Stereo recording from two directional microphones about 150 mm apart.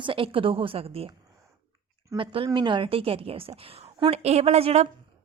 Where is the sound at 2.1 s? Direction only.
35° right (ahead or behind).